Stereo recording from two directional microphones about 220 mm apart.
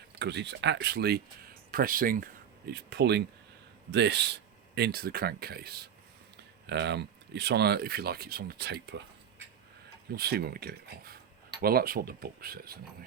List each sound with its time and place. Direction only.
0.2 s speech: 50° right (ahead or behind)
10.1 s speech: 45° right (ahead or behind)